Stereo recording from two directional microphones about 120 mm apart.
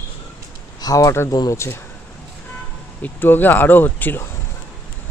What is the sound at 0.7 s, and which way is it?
Speech, 30° left (ahead or behind).